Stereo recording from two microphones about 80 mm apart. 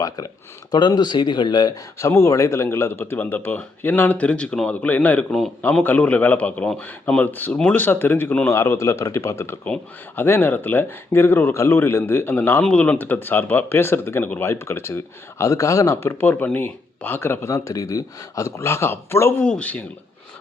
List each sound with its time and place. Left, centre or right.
0.7 s speech: left
2.0 s speech: left
8.4 s speech: left
16.0 s speech: left
17.5 s speech: left
19.4 s a man's voice: centre